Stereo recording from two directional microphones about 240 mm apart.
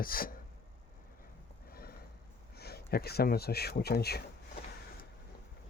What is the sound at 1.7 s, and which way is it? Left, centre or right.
Horse, left.